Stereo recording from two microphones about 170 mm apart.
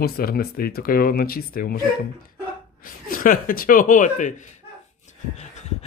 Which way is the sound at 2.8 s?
55° left (ahead or behind).